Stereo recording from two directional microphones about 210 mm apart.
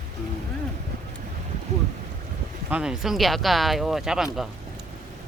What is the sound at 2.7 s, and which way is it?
Speech, 5° right (ahead or behind).